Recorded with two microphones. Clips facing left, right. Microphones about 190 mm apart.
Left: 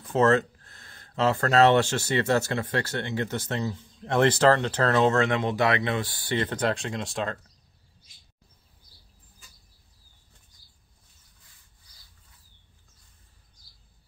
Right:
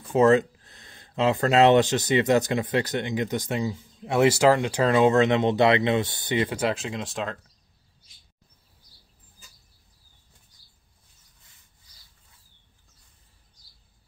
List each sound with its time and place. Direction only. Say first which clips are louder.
0.1 s speech: right 3 dB; 15° right (ahead or behind)